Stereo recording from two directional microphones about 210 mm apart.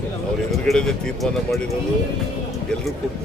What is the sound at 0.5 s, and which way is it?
Speech, centre (ahead or behind).